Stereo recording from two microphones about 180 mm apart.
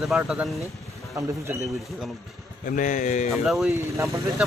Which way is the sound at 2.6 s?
45° left (ahead or behind).